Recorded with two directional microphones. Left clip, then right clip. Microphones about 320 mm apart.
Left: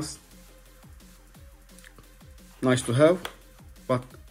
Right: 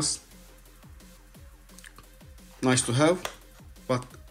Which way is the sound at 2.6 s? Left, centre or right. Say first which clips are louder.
Left 3 dB; centre.